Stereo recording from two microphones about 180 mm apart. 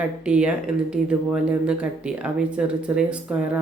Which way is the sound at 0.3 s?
5° right (ahead or behind).